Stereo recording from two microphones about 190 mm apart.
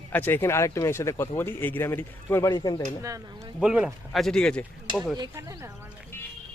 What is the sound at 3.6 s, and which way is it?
Speech, 5° right (ahead or behind).